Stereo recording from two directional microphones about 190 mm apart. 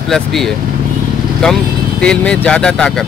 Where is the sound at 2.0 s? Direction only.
5° left (ahead or behind).